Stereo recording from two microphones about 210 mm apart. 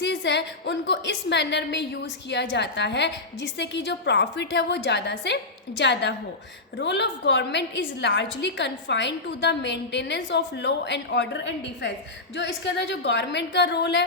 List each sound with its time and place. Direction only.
0.0 s a woman's voice: 55° left (ahead or behind)